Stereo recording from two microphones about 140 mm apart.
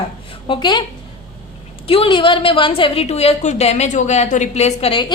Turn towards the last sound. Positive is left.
turn(degrees=40)  # may be behind; listen again after turning